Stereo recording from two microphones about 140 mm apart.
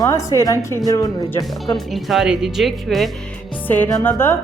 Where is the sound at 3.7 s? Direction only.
15° left (ahead or behind).